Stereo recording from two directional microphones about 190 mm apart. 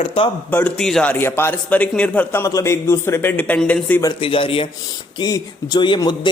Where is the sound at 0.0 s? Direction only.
30° left (ahead or behind).